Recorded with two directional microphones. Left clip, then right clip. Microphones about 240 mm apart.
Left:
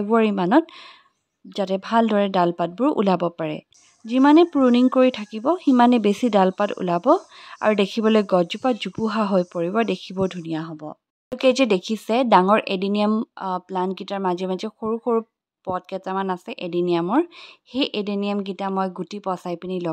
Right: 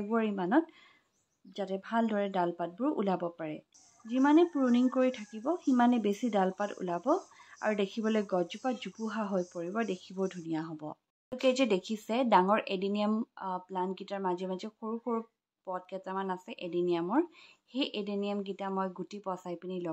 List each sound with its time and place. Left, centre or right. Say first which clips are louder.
0.1 s speech: left 12 dB; left
11.3 s speech: left 10 dB; left